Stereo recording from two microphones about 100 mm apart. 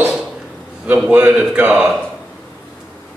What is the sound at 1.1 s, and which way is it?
Speech, 15° right (ahead or behind).